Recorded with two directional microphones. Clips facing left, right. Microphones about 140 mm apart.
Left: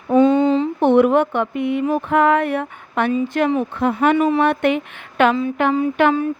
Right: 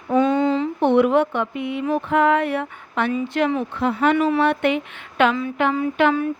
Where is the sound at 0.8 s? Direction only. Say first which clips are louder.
Left 2 dB; 50° left (ahead or behind).